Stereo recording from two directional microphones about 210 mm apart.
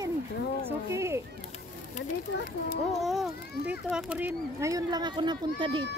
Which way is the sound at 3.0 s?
Centre (ahead or behind).